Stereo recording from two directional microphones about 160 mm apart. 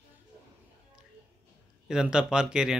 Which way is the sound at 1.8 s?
5° right (ahead or behind).